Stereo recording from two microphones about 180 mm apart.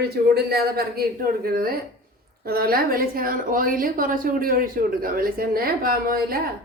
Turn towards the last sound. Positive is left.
turn(degrees=-55)  # may be behind; listen again after turning